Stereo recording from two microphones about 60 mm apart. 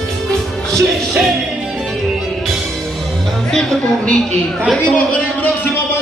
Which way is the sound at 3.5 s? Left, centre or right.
Centre.